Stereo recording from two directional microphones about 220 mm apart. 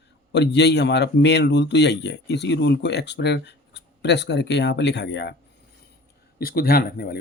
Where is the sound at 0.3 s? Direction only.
50° left (ahead or behind).